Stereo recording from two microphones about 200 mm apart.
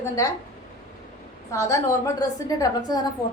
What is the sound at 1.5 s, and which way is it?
A woman's voice, 15° left (ahead or behind).